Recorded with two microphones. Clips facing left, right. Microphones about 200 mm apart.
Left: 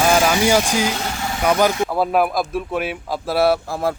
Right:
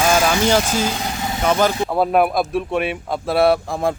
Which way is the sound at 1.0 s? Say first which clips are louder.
Right 1 dB; 20° right (ahead or behind).